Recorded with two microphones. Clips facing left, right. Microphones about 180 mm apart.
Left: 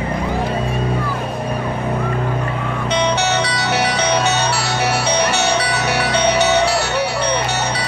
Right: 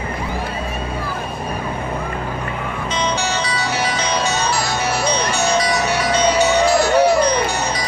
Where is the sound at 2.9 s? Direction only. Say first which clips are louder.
Left 4 dB; 70° left (ahead or behind).